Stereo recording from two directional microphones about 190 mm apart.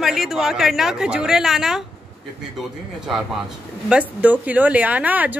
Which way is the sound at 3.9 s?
5° right (ahead or behind).